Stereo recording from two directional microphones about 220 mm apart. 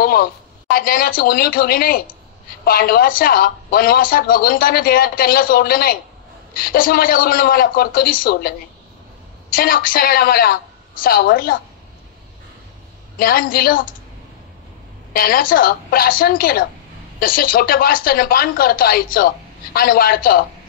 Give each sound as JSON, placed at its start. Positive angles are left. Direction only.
{"t": 0.0, "sound": "speech", "side_deg": 45}
{"t": 13.2, "sound": "speech", "side_deg": 40}
{"t": 15.1, "sound": "speech", "side_deg": 40}